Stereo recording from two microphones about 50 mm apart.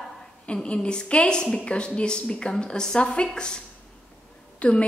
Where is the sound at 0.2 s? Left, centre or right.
Centre.